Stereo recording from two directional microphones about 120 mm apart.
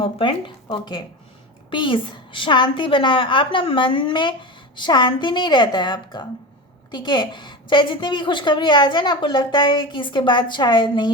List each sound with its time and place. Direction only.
0.0 s a woman's voice: 45° left (ahead or behind)